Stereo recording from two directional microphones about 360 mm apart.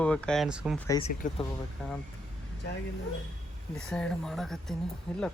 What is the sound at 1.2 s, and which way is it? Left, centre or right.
Speech, left.